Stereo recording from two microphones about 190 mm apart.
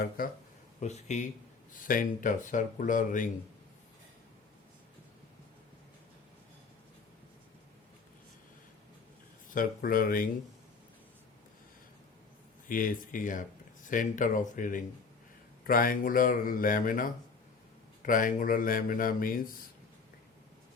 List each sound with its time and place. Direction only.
0.8 s speech: 35° left (ahead or behind)
9.6 s speech: 50° left (ahead or behind)
12.6 s speech: 45° left (ahead or behind)